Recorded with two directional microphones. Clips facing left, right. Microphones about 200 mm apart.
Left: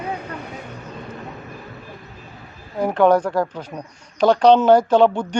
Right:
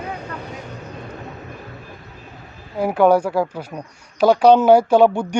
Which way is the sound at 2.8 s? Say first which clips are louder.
Right 1 dB; 10° right (ahead or behind).